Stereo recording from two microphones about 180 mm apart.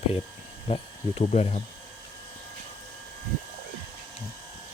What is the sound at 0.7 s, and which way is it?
Speech, 35° left (ahead or behind).